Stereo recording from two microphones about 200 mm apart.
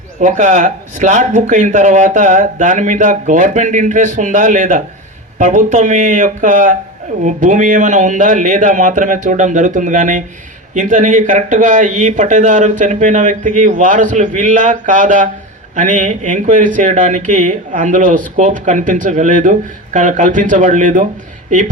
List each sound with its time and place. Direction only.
0.2 s speech: 35° right (ahead or behind)